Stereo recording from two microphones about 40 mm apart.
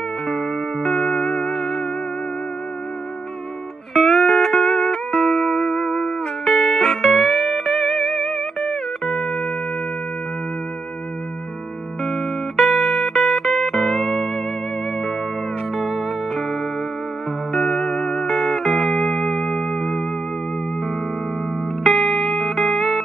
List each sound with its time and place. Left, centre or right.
0.7 s music: left
3.9 s music: centre
6.4 s music: centre
12.0 s music: centre
15.7 s music: centre
17.6 s music: left
18.4 s music: centre
19.1 s music: left
21.8 s music: centre